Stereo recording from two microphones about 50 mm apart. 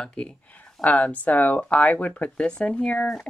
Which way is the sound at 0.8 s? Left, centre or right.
Left.